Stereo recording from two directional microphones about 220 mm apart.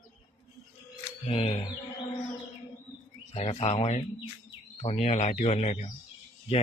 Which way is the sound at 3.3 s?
30° left (ahead or behind).